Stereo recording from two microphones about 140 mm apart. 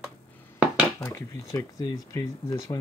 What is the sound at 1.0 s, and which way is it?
Speech, 20° left (ahead or behind).